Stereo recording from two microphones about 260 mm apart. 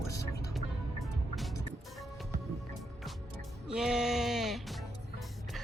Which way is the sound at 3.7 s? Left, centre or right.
Centre.